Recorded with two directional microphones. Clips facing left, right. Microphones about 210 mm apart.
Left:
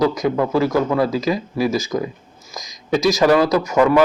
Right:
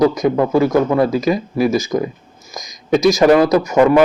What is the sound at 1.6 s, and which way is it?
Speech, 50° right (ahead or behind).